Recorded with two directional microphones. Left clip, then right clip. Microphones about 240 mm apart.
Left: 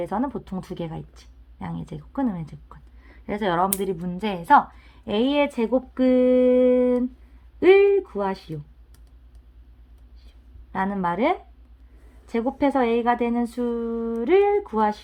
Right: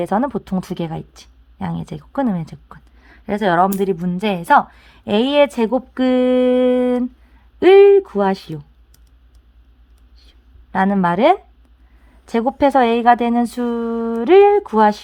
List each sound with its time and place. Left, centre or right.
0.0 s a woman's voice: right
10.2 s a sound: right
12.2 s a woman's voice: right